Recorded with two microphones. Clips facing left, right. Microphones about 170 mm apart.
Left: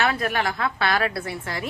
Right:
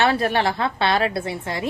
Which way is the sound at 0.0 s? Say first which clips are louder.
Right 4 dB; 30° right (ahead or behind).